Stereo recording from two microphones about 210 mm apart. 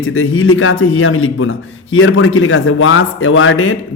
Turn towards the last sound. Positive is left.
turn(degrees=70)  # may be behind; listen again after turning